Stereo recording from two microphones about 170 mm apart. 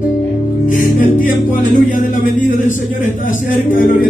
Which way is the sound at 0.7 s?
50° left (ahead or behind).